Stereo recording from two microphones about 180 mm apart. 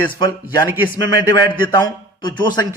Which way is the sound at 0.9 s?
25° left (ahead or behind).